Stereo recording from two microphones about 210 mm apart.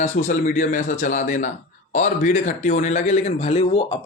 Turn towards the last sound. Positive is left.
turn(degrees=25)  # may be behind; listen again after turning